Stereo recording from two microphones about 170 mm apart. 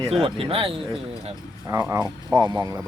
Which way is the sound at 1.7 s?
15° right (ahead or behind).